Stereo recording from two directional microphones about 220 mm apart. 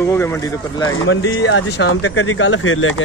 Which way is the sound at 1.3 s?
60° left (ahead or behind).